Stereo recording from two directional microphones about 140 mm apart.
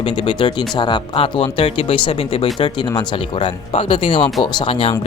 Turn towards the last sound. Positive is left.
turn(degrees=40)  # may be behind; listen again after turning